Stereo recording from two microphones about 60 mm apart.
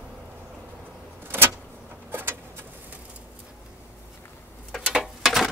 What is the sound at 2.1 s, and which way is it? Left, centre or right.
Vehicle, right.